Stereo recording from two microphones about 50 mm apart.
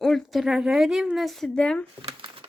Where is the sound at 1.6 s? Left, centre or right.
Left.